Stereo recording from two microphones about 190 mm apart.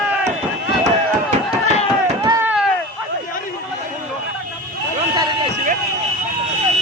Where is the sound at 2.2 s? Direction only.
20° right (ahead or behind).